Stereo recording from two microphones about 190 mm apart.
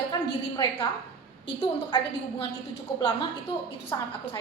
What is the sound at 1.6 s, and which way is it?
Speech, 30° left (ahead or behind).